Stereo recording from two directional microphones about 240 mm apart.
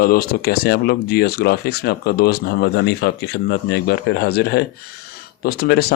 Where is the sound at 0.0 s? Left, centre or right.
Left.